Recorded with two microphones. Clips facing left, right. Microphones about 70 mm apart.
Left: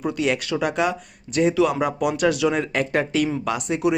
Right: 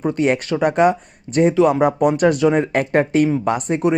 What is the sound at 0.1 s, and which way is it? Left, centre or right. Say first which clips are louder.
Speech: right 5 dB; right.